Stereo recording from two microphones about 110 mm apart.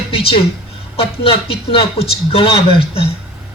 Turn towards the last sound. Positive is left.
turn(degrees=60)  # may be behind; listen again after turning